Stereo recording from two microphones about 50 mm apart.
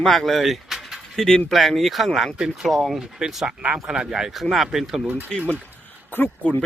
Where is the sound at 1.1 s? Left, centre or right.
Centre.